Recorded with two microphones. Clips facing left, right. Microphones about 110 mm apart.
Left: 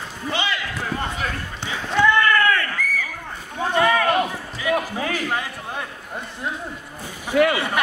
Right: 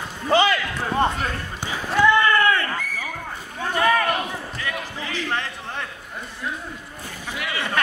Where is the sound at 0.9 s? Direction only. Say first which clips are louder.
Right 7 dB; 35° right (ahead or behind).